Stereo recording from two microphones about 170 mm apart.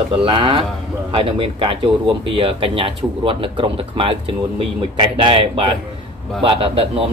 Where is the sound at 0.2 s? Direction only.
30° right (ahead or behind).